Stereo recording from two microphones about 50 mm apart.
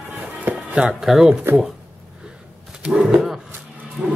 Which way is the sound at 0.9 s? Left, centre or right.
Centre.